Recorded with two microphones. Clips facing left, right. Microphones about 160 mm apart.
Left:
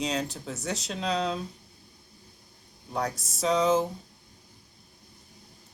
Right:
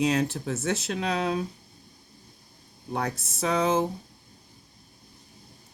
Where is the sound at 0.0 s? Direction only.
55° right (ahead or behind).